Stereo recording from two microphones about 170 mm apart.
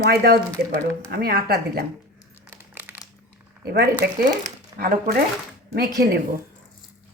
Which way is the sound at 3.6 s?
70° right (ahead or behind).